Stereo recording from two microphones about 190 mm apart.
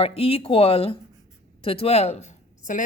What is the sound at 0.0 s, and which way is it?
A woman's voice, 30° left (ahead or behind).